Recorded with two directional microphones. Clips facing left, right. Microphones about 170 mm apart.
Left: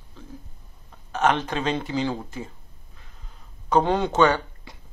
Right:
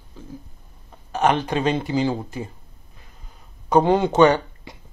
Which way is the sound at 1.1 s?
10° right (ahead or behind).